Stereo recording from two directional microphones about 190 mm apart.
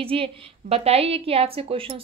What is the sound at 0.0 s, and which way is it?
A woman's voice, 30° right (ahead or behind).